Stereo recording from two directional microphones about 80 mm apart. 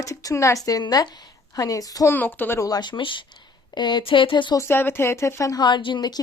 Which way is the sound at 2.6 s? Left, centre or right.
Left.